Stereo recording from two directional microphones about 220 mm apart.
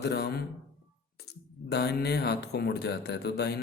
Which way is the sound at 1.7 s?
50° left (ahead or behind).